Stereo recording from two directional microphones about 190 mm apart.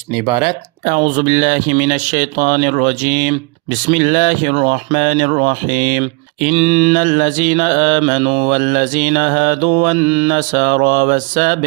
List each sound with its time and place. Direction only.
1.1 s speech: 45° right (ahead or behind)